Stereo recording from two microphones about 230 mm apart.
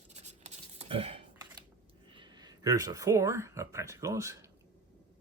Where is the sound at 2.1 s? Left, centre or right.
Centre.